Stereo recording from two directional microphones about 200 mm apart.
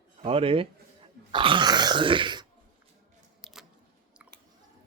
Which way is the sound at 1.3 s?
25° right (ahead or behind).